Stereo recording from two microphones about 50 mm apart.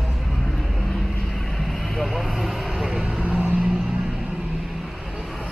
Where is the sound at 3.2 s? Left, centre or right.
Right.